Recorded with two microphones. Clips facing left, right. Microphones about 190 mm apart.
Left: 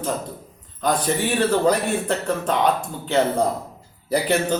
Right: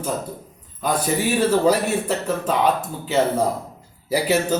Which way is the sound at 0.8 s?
10° right (ahead or behind).